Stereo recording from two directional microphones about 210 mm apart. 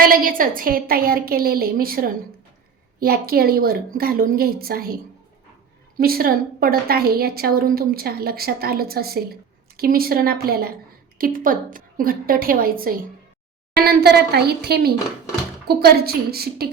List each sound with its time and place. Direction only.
0.0 s a woman's voice: 45° right (ahead or behind)
6.0 s a woman's voice: 45° right (ahead or behind)